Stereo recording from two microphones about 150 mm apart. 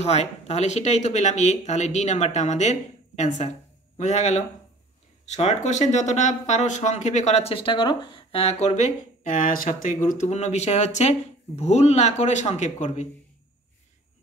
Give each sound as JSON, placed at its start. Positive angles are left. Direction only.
{"t": 0.0, "sound": "speech", "side_deg": 45}